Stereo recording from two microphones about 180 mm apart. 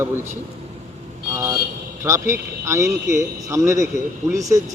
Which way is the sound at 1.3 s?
15° right (ahead or behind).